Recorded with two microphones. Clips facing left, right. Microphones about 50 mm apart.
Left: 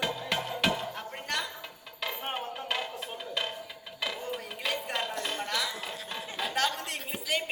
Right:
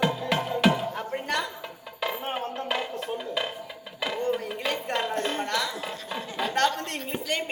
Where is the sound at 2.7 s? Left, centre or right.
Centre.